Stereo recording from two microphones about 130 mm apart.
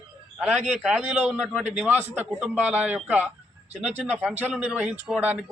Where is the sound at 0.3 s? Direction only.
5° right (ahead or behind).